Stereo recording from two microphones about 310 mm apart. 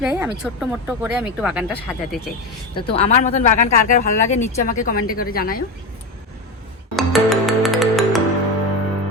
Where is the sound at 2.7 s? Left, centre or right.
Centre.